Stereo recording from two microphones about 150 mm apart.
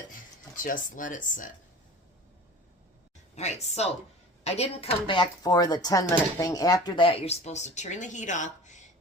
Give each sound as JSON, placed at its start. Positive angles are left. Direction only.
{"t": 0.5, "sound": "speech", "side_deg": 65}
{"t": 3.3, "sound": "a woman's voice", "side_deg": 50}